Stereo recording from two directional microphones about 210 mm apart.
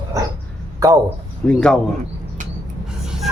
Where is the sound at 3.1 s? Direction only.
Centre (ahead or behind).